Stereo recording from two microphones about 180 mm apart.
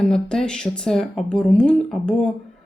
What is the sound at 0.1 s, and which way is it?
Speech, 5° left (ahead or behind).